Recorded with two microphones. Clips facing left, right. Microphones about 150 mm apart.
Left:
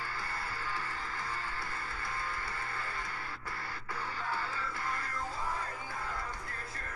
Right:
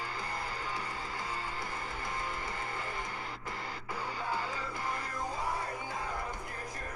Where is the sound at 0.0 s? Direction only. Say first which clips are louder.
Right 2 dB; 15° right (ahead or behind).